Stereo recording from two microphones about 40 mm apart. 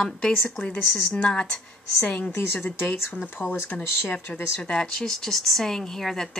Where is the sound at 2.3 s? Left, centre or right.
Left.